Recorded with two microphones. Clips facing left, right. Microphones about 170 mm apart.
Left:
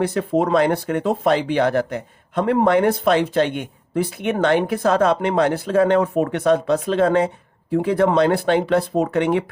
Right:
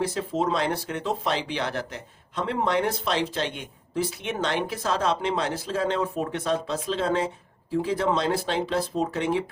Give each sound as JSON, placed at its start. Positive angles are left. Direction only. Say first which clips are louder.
{"t": 0.0, "sound": "speech", "louder": "left 7 dB", "side_deg": 60}